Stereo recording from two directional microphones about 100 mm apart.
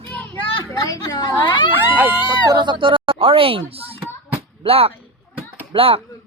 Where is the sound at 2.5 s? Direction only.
50° right (ahead or behind); by 4.0 s 70° right (ahead or behind).